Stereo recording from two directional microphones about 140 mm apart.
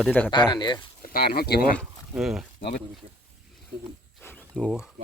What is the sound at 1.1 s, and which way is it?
Speech, 90° left.